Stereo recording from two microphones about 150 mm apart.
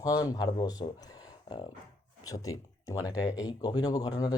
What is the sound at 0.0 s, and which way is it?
Speech, 25° left (ahead or behind).